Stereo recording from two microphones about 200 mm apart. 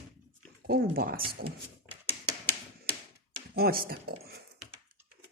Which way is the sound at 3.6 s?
50° right (ahead or behind).